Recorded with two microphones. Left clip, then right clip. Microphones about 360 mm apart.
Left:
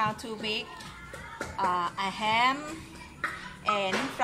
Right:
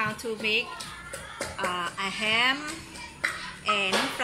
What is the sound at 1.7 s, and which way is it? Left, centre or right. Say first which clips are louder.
Speech: even; centre.